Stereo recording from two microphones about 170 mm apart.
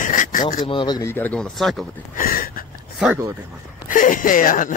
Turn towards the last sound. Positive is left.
turn(degrees=50)  # may be behind; listen again after turning